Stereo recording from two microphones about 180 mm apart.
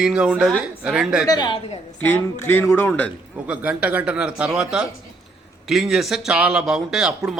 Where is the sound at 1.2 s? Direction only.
20° left (ahead or behind).